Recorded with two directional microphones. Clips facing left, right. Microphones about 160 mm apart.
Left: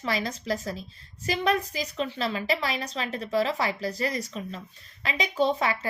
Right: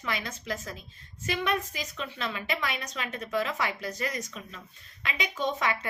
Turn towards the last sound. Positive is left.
turn(degrees=35)  # may be behind; listen again after turning